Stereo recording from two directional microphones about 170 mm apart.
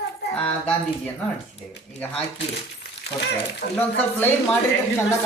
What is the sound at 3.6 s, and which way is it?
Speech, 50° left (ahead or behind).